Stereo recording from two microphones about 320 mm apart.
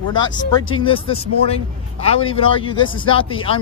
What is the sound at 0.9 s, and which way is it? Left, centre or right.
Speech, centre.